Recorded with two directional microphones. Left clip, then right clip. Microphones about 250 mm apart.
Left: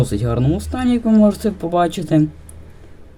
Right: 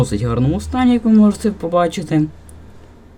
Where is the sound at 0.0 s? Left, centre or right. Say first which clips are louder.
Right 1 dB; centre.